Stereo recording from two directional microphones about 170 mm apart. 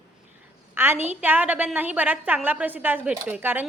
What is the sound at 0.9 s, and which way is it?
Speech, 40° right (ahead or behind).